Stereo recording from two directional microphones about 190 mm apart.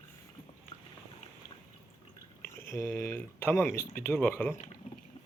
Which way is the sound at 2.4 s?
15° left (ahead or behind).